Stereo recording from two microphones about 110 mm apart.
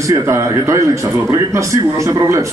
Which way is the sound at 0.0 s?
25° right (ahead or behind).